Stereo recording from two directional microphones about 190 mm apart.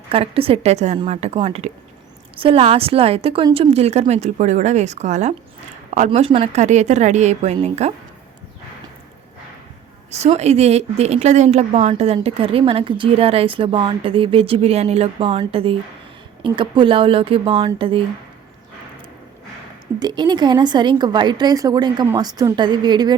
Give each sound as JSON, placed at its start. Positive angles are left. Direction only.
{"t": 0.1, "sound": "a woman's voice", "side_deg": -30}
{"t": 10.1, "sound": "a woman's voice", "side_deg": -35}
{"t": 20.0, "sound": "a woman's voice", "side_deg": -20}